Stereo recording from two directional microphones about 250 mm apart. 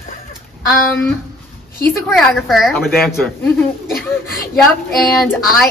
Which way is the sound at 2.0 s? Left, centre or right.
Centre.